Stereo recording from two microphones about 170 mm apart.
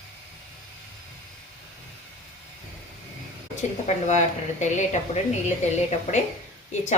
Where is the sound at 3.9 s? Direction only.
40° left (ahead or behind).